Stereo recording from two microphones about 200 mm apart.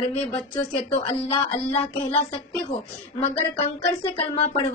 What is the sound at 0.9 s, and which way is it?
Speech, 30° left (ahead or behind).